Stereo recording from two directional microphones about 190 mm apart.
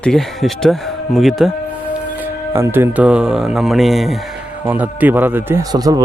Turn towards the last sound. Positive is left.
turn(degrees=-20)  # may be behind; listen again after turning